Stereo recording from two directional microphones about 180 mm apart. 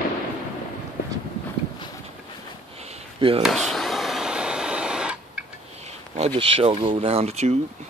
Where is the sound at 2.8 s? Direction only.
35° right (ahead or behind).